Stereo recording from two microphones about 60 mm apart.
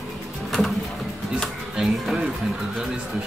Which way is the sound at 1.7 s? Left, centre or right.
Centre.